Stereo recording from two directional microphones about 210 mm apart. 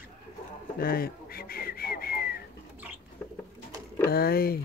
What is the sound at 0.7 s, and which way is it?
Whistling, 45° left (ahead or behind).